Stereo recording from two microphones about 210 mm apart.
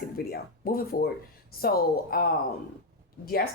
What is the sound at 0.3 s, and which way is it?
Speech, 45° left (ahead or behind).